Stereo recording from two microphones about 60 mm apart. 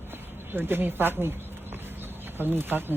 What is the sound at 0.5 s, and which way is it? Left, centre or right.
Speech, right.